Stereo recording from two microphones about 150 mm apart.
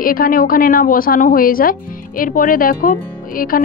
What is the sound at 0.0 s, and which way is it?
A woman's voice, 70° left (ahead or behind).